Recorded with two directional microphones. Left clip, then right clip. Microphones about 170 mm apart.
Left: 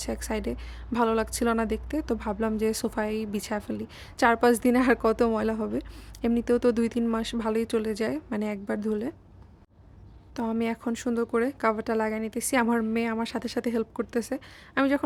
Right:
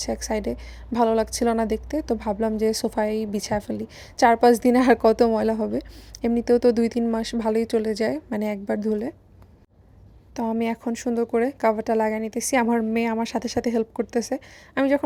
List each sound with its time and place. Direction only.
0.0 s a woman's voice: 10° right (ahead or behind)
10.3 s a woman's voice: 10° right (ahead or behind)